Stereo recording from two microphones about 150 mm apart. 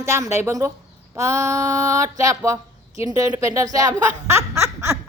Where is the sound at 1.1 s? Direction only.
20° right (ahead or behind).